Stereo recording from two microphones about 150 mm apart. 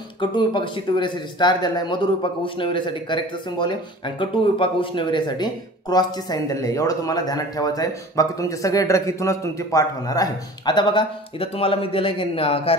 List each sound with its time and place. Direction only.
0.2 s speech: 30° left (ahead or behind)